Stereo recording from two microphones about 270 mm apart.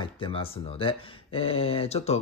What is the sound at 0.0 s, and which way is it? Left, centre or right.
Speech, centre.